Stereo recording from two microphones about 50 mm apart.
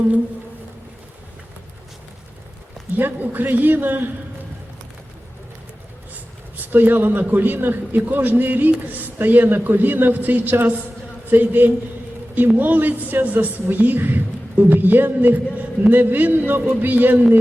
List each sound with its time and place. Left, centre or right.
2.9 s a man's voice: right
6.6 s a man's voice: right